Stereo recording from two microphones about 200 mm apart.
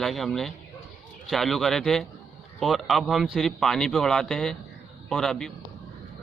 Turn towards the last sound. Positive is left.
turn(degrees=0)  # may be behind; listen again after turning